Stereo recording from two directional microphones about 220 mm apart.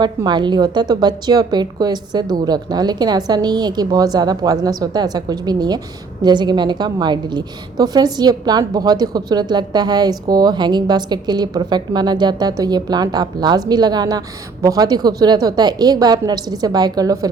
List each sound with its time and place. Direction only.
0.0 s a woman's voice: 20° right (ahead or behind)